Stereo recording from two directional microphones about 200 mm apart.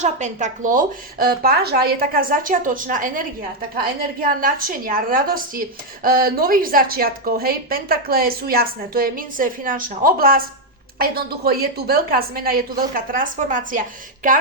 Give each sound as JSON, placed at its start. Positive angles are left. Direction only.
{"t": 0.0, "sound": "speech", "side_deg": -35}